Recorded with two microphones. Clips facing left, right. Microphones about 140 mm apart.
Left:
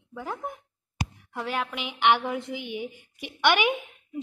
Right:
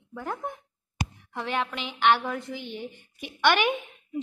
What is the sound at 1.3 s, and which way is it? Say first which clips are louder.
A woman's voice: right 1 dB; 5° left (ahead or behind).